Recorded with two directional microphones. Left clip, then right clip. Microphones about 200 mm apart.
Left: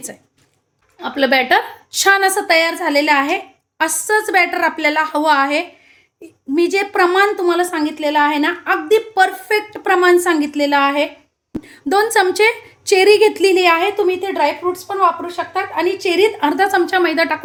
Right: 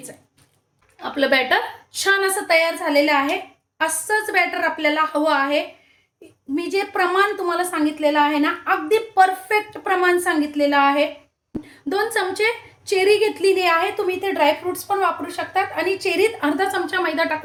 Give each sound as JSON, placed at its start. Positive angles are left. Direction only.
{"t": 0.9, "sound": "a woman's voice", "side_deg": 45}